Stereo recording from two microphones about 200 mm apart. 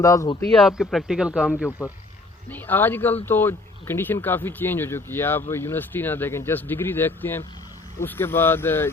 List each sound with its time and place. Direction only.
0.0 s speech: 15° left (ahead or behind)
0.8 s speech: centre (ahead or behind)
2.5 s speech: 10° left (ahead or behind)